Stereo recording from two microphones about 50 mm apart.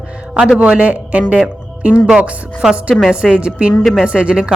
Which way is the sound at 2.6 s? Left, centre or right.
Centre.